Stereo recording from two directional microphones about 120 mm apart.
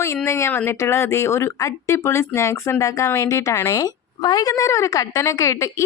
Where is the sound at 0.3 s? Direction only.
20° left (ahead or behind).